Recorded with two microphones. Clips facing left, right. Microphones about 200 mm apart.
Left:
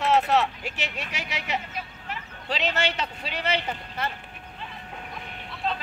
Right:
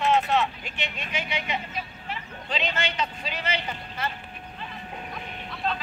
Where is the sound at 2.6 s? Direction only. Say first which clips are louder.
Left 1 dB; 70° left (ahead or behind).